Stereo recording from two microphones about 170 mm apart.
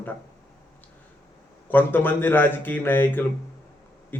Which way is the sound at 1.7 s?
10° left (ahead or behind).